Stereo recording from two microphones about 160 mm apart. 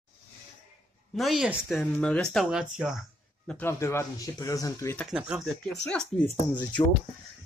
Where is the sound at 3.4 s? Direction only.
10° left (ahead or behind).